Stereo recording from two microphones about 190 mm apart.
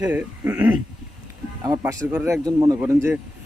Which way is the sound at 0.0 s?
10° right (ahead or behind).